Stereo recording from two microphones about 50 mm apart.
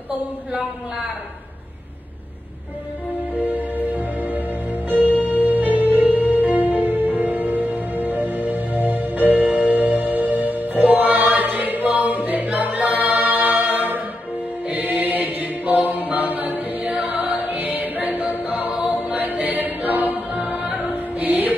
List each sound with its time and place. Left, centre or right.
3.3 s music: right
14.7 s chant: right
19.0 s music: right